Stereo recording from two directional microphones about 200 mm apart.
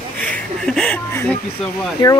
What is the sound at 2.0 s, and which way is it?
Speech, 20° left (ahead or behind).